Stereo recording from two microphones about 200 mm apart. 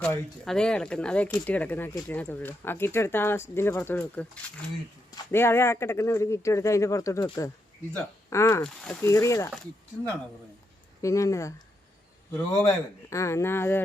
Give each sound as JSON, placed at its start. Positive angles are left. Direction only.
{"t": 0.0, "sound": "speech", "side_deg": 5}
{"t": 11.0, "sound": "speech", "side_deg": 15}
{"t": 12.6, "sound": "speech", "side_deg": 15}